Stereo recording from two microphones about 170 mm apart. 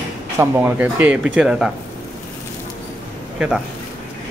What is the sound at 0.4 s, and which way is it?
Speech, 10° right (ahead or behind).